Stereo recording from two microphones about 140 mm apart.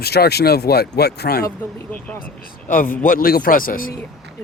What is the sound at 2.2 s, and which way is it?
Speech, 75° left (ahead or behind).